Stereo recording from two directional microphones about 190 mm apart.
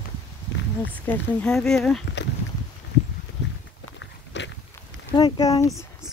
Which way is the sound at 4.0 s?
75° left (ahead or behind).